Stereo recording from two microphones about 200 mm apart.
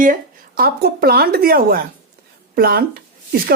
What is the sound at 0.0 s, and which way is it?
Speech, 45° right (ahead or behind).